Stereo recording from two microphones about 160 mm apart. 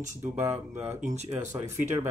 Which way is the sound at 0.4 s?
15° right (ahead or behind).